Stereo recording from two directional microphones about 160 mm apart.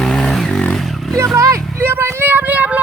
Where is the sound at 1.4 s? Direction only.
20° right (ahead or behind).